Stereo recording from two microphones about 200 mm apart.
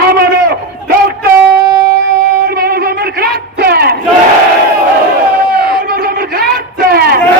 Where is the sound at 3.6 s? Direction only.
50° right (ahead or behind).